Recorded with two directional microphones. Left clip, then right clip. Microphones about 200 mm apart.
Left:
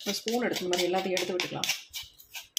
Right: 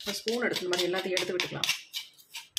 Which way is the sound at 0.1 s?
15° left (ahead or behind).